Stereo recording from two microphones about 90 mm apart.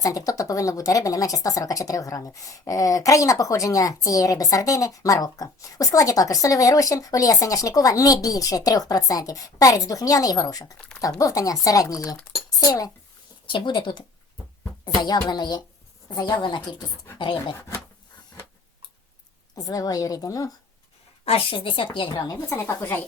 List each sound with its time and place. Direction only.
0.0 s a child's voice: 40° left (ahead or behind)
13.5 s a woman's voice: 60° left (ahead or behind)
19.5 s speech: 45° left (ahead or behind)
21.2 s speech: 80° left
22.1 s speech: 40° left (ahead or behind)
22.5 s speech: 25° left (ahead or behind)